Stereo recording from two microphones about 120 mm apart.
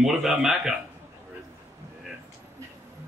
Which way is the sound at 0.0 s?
5° right (ahead or behind).